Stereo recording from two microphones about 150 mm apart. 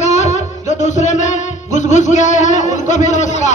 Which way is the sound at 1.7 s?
55° left (ahead or behind).